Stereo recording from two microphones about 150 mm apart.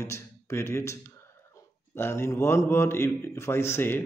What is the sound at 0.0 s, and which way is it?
Speech, 15° left (ahead or behind).